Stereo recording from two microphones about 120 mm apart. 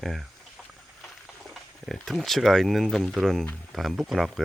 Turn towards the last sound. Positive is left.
turn(degrees=0)  # may be behind; listen again after turning